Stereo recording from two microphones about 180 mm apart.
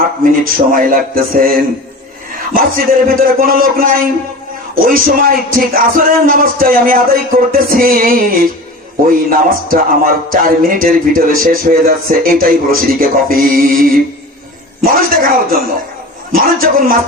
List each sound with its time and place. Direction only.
0.3 s a man's voice: 50° right (ahead or behind)
15.1 s a man's voice: 55° right (ahead or behind)